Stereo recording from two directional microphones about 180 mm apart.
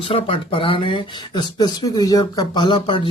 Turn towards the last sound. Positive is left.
turn(degrees=30)  # may be behind; listen again after turning